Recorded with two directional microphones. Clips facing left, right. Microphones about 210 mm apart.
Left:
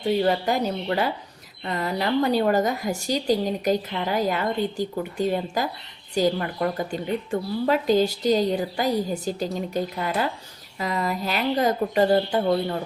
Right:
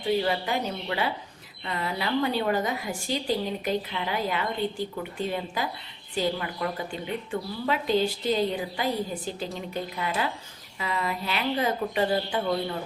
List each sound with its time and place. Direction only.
0.3 s a woman's voice: 45° left (ahead or behind)